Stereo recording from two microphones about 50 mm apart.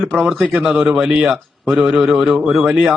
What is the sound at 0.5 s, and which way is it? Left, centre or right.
Speech, centre.